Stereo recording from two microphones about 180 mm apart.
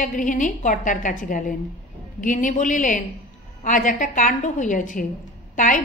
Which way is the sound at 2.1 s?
45° left (ahead or behind).